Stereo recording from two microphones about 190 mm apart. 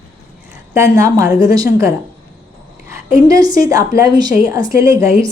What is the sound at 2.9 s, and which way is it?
A woman's voice, 20° right (ahead or behind).